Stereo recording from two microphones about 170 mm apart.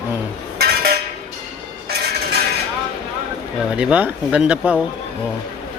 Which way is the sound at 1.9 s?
70° right (ahead or behind).